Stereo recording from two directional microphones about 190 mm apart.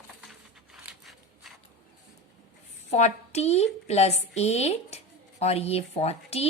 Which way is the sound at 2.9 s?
35° left (ahead or behind).